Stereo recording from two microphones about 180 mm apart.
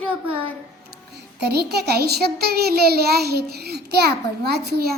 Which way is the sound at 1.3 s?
65° right (ahead or behind).